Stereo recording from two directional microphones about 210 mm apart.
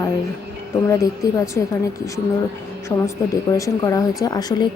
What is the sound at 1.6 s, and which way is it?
Speech, 15° left (ahead or behind).